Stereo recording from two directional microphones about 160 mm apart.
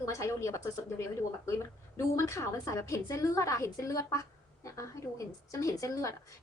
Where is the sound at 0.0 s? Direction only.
20° left (ahead or behind).